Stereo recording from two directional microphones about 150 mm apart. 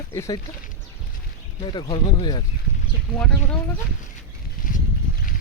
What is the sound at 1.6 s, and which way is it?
Speech, 30° left (ahead or behind).